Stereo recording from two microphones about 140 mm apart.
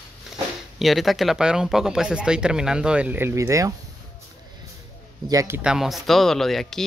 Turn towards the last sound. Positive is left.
turn(degrees=0)  # may be behind; listen again after turning